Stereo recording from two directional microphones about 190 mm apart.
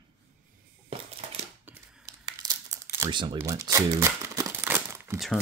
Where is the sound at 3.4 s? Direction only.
15° right (ahead or behind).